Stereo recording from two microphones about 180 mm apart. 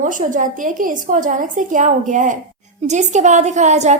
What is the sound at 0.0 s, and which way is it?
A woman's voice, 45° right (ahead or behind).